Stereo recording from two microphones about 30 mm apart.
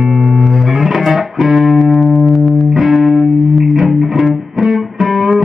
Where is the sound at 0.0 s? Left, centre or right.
Centre.